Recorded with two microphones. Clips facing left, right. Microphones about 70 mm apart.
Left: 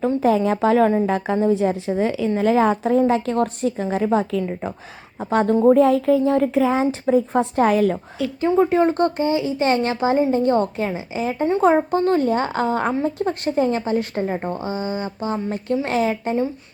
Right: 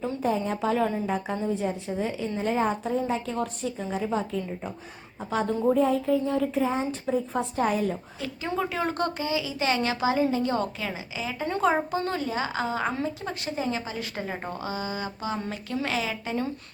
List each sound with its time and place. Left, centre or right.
0.0 s a woman's voice: left
5.2 s speech: left
5.5 s a woman's voice: left
5.8 s a woman's voice: left
7.1 s a woman's voice: left
8.4 s a woman's voice: left